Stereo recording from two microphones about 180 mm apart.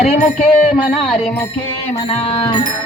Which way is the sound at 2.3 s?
30° left (ahead or behind).